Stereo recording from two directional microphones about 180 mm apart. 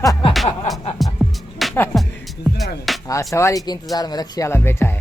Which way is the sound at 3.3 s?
20° left (ahead or behind).